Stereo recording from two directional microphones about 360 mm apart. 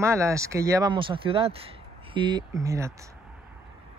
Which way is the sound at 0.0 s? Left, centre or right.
Centre.